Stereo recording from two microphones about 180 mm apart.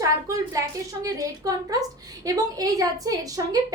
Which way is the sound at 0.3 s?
20° right (ahead or behind).